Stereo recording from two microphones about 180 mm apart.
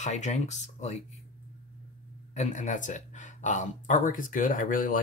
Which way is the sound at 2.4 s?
40° left (ahead or behind).